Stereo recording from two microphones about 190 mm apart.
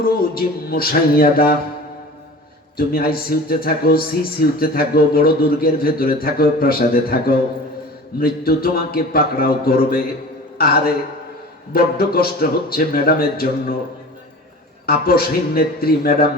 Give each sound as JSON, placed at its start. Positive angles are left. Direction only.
{"t": 0.0, "sound": "a man's voice", "side_deg": 50}
{"t": 2.7, "sound": "a man's voice", "side_deg": 50}
{"t": 14.8, "sound": "a man's voice", "side_deg": 55}